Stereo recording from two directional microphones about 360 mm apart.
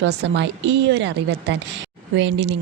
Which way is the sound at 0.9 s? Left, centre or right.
Right.